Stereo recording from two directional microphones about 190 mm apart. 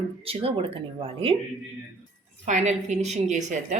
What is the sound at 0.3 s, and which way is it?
Speech, 30° right (ahead or behind).